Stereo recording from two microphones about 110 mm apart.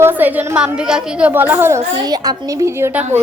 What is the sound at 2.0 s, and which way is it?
A woman's voice, 35° right (ahead or behind).